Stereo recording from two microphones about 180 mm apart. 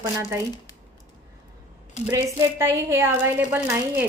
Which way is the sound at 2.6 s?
15° right (ahead or behind).